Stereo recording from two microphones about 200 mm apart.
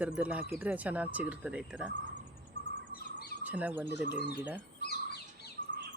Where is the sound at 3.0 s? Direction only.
50° left (ahead or behind).